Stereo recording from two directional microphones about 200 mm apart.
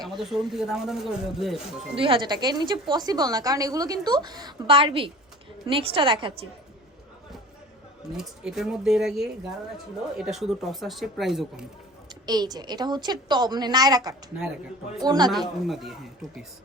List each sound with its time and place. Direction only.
0.0 s speech: centre (ahead or behind)
2.0 s a woman's voice: 25° right (ahead or behind)
8.1 s speech: centre (ahead or behind)
12.2 s a woman's voice: 20° right (ahead or behind)
15.3 s speech: centre (ahead or behind)